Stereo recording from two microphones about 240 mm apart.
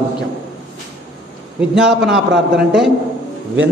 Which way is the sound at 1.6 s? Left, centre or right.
Centre.